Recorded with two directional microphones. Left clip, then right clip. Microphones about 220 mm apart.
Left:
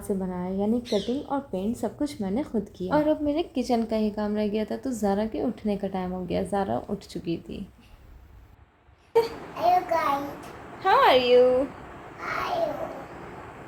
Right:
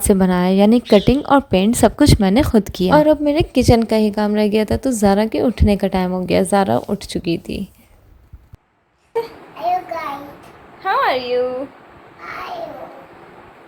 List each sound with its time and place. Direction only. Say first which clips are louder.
0.0 s a woman's voice: right 15 dB; 50° right (ahead or behind)
9.1 s child singing: even; 5° left (ahead or behind)
10.8 s a sound: right 2 dB; centre (ahead or behind)